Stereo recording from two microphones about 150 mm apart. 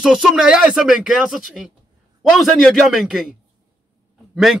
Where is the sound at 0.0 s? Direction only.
5° right (ahead or behind).